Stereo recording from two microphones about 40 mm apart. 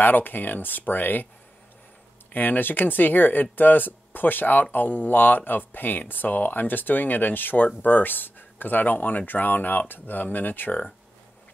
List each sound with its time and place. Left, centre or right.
0.0 s speech: left
2.3 s speech: left